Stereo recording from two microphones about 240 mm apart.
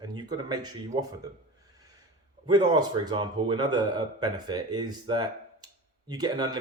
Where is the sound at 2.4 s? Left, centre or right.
Centre.